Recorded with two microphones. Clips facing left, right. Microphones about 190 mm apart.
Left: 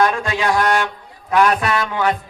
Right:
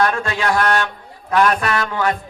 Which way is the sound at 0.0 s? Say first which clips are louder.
Left 1 dB; 15° left (ahead or behind).